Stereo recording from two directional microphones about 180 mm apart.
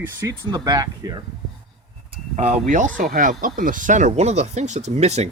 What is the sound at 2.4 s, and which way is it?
Speech, 40° right (ahead or behind).